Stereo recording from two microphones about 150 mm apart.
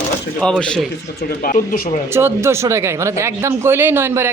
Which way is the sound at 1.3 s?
70° left (ahead or behind).